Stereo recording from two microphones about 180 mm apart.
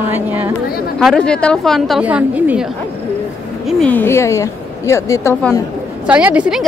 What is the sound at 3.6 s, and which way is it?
A woman's voice, 10° left (ahead or behind).